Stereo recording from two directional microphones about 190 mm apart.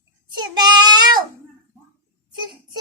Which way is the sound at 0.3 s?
20° right (ahead or behind).